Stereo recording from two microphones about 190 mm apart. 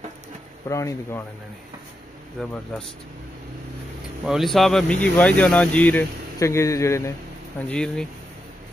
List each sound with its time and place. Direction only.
0.7 s speech: 15° left (ahead or behind)
2.4 s speech: centre (ahead or behind)
4.3 s speech: centre (ahead or behind)